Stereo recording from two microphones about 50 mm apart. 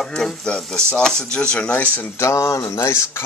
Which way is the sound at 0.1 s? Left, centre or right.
Centre.